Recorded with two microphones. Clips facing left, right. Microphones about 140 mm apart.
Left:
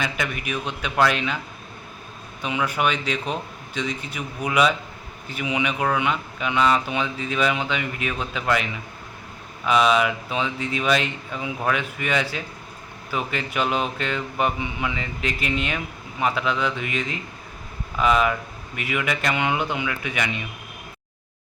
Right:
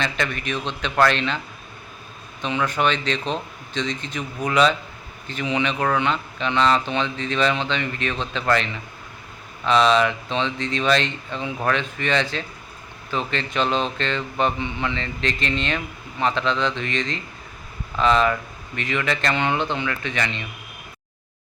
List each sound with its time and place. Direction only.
0.0 s speech: 10° left (ahead or behind)
2.4 s speech: 10° left (ahead or behind)